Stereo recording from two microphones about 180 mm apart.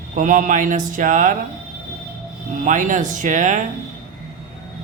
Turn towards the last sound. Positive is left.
turn(degrees=-45)  # may be behind; listen again after turning